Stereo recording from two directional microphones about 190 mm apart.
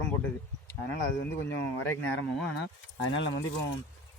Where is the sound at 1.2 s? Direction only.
10° left (ahead or behind).